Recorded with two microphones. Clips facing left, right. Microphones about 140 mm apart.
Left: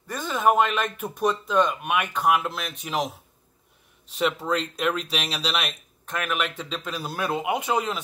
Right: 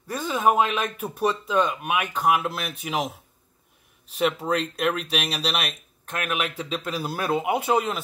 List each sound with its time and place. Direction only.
0.0 s speech: 10° right (ahead or behind)
4.1 s speech: centre (ahead or behind)